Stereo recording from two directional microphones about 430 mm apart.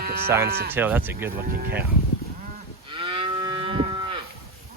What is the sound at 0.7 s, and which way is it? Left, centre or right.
Speech, centre.